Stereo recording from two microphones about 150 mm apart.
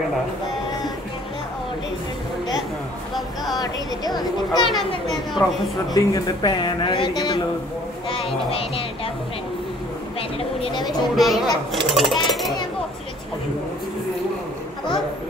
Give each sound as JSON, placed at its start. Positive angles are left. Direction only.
{"t": 3.5, "sound": "speech", "side_deg": 25}
{"t": 10.6, "sound": "speech", "side_deg": 30}
{"t": 11.1, "sound": "speech", "side_deg": 0}